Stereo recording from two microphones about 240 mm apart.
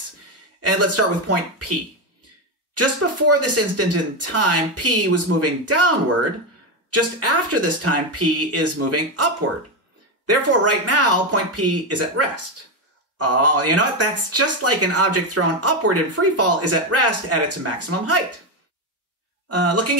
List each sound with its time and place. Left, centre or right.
0.6 s speech: right
2.7 s speech: right
6.9 s speech: right
19.5 s speech: right